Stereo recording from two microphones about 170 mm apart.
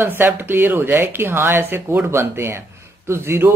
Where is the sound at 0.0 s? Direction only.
15° right (ahead or behind).